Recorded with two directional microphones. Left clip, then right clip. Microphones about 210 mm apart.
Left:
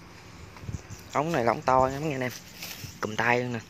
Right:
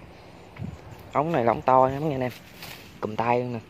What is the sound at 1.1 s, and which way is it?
Speech, 5° right (ahead or behind).